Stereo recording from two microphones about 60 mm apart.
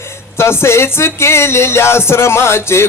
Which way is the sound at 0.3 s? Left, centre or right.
Left.